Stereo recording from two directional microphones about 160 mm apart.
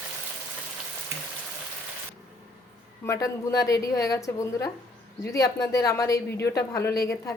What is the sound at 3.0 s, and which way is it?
A woman's voice, 20° left (ahead or behind).